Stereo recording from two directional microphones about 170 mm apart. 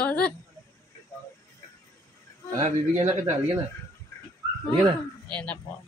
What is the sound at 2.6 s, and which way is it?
Speech, 45° right (ahead or behind).